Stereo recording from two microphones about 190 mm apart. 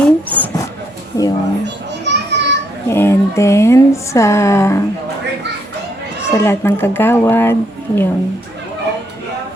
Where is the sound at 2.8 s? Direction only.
15° left (ahead or behind).